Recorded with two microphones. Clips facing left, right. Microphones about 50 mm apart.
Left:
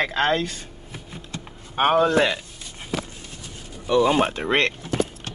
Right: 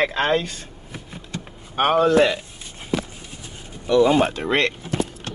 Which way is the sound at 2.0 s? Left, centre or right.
Centre.